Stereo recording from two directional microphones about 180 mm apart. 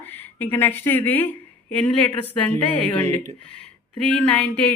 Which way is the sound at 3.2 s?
5° left (ahead or behind).